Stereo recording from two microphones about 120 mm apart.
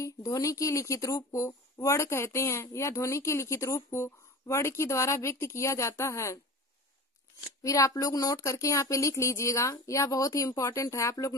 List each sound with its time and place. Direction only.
0.0 s speech: 30° left (ahead or behind)
7.6 s speech: 30° left (ahead or behind)